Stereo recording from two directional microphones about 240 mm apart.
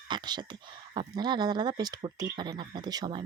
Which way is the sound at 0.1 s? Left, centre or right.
Centre.